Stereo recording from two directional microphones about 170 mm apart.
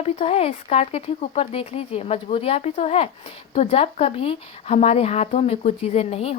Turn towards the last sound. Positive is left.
turn(degrees=35)  # may be behind; listen again after turning